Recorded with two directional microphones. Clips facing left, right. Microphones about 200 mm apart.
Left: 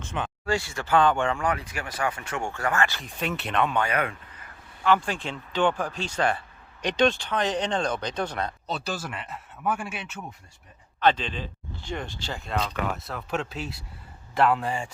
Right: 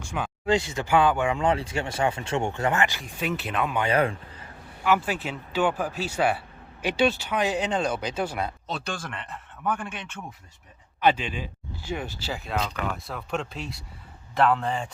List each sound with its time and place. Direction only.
0.1 s speech: 15° right (ahead or behind)
1.4 s speech: 25° right (ahead or behind)
3.0 s speech: centre (ahead or behind)
3.8 s speech: 30° right (ahead or behind)
4.8 s speech: 5° right (ahead or behind)
11.0 s speech: 10° right (ahead or behind); by 14.8 s 10° left (ahead or behind)